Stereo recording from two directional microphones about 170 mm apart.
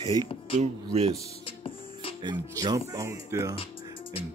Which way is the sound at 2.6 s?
20° right (ahead or behind).